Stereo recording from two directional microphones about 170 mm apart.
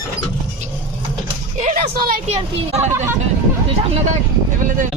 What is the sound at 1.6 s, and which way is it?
Speech, 60° right (ahead or behind).